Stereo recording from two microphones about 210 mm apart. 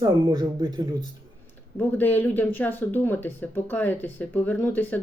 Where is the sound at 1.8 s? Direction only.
10° left (ahead or behind).